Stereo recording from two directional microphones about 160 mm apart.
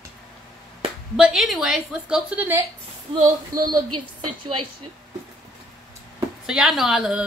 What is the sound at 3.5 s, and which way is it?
Speech, 25° right (ahead or behind).